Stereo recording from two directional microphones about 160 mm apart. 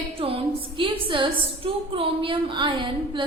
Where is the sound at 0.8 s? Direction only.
35° right (ahead or behind).